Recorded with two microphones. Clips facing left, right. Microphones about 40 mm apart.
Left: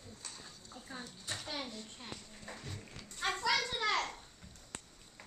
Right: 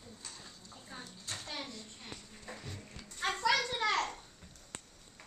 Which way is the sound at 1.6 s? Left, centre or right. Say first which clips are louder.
Left 1 dB; centre.